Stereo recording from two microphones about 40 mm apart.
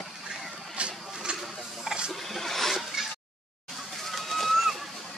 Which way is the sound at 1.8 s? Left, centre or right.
Centre.